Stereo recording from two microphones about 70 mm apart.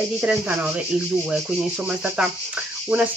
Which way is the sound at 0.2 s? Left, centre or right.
Right.